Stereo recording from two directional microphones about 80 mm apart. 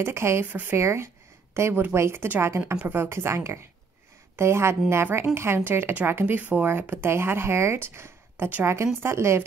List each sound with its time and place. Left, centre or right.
0.0 s a woman's voice: right